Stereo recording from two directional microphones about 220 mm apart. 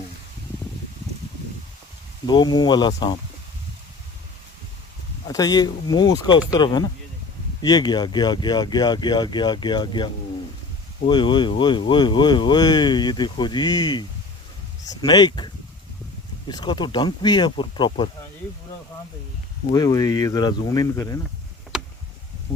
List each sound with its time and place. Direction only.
2.2 s speech: 20° left (ahead or behind)
5.3 s speech: 15° left (ahead or behind)
15.0 s speech: 20° left (ahead or behind)
19.7 s speech: 15° left (ahead or behind)
21.7 s tick: 5° right (ahead or behind)